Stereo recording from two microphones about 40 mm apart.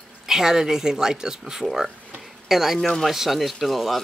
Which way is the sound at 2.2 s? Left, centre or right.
Centre.